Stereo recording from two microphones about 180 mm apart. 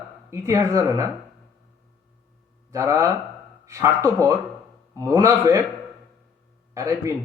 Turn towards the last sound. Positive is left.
turn(degrees=-15)  # may be behind; listen again after turning